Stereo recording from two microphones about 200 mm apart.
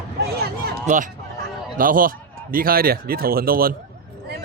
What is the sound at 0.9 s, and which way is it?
A man's voice, 35° right (ahead or behind).